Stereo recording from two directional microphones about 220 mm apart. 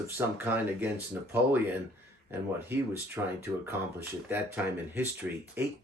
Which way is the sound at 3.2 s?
10° right (ahead or behind).